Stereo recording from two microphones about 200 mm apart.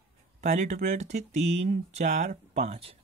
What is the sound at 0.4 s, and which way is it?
Speech, 35° right (ahead or behind).